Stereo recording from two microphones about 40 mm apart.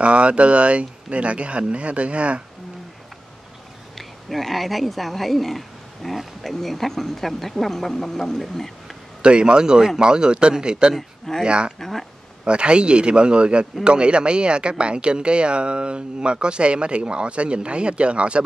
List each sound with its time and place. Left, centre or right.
0.0 s speech: right
4.0 s speech: centre
9.2 s speech: right
11.0 s speech: centre
11.4 s speech: right
11.8 s speech: centre
12.4 s speech: right